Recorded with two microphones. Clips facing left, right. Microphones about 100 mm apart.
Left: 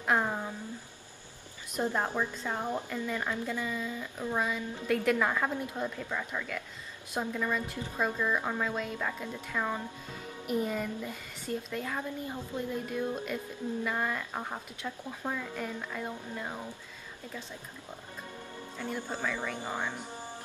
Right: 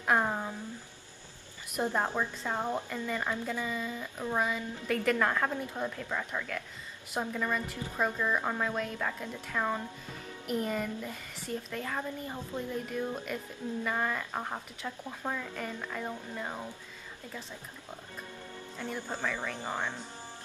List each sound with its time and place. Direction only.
0.2 s a sound: 10° right (ahead or behind)
1.7 s speech: 10° right (ahead or behind)
3.1 s speech: 5° right (ahead or behind)
18.8 s a woman's voice: 10° left (ahead or behind)